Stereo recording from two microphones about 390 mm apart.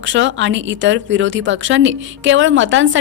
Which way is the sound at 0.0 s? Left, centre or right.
Right.